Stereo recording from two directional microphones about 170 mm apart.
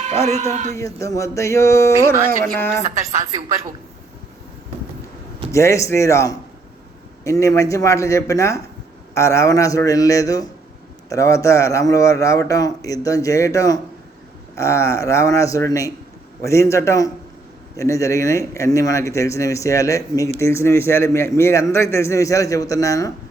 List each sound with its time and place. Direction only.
0.3 s speech: 40° right (ahead or behind)
0.8 s a man's voice: 20° left (ahead or behind)
2.8 s a woman's voice: 40° right (ahead or behind)
5.5 s a man's voice: 15° left (ahead or behind)